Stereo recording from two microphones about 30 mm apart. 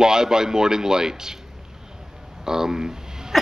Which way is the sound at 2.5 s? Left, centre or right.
Centre.